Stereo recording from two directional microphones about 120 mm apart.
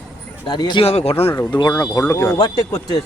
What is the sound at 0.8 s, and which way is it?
Speech, 60° left (ahead or behind).